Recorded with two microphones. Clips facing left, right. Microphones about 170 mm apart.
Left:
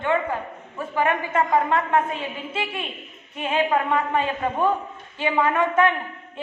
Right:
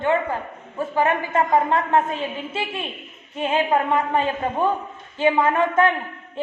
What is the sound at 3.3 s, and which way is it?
A woman's voice, 30° right (ahead or behind).